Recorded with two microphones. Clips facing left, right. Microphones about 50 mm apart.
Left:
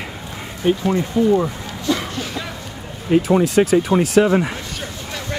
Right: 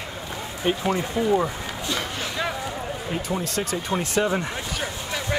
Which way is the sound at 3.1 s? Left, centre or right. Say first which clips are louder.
Left 16 dB; left.